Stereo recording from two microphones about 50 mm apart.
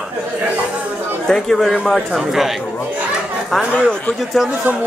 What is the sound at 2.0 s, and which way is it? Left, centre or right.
Speech, centre.